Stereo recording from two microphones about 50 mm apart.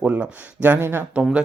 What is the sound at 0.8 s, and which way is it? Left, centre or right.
Speech, right.